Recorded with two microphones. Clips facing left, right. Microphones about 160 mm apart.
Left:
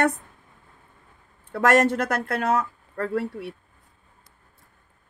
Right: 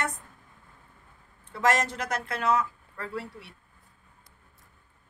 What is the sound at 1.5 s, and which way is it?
Speech, 55° left (ahead or behind).